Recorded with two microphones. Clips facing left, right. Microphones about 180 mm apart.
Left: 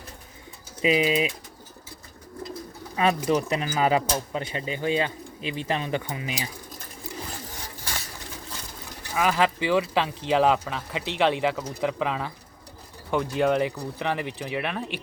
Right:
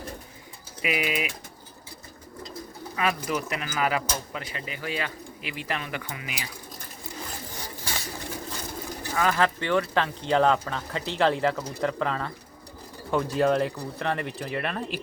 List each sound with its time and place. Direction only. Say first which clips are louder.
0.8 s speech: left 6 dB; 25° left (ahead or behind)
2.9 s speech: left 5 dB; 25° left (ahead or behind)
9.1 s speech: left 1 dB; 10° left (ahead or behind)